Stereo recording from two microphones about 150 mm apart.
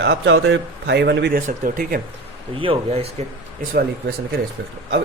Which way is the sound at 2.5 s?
35° right (ahead or behind).